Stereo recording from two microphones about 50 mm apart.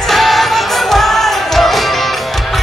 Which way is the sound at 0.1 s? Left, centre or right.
Centre.